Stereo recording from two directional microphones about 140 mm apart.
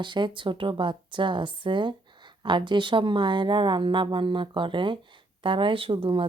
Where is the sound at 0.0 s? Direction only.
35° right (ahead or behind).